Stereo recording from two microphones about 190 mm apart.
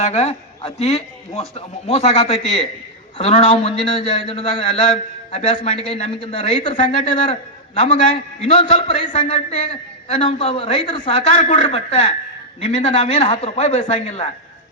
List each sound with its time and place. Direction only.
0.0 s a man's voice: 35° left (ahead or behind)
7.9 s a man's voice: 30° left (ahead or behind)